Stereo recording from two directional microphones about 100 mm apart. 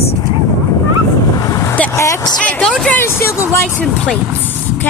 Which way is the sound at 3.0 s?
25° left (ahead or behind).